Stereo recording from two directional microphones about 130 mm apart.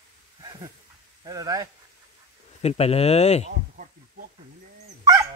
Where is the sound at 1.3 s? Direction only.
25° right (ahead or behind).